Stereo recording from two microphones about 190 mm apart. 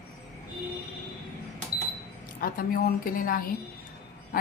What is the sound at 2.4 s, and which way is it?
Speech, 50° left (ahead or behind).